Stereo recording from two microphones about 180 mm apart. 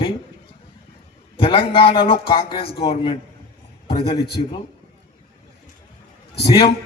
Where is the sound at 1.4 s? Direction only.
30° left (ahead or behind).